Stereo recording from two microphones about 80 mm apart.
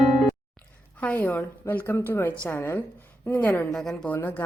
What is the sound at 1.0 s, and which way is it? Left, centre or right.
A woman's voice, left.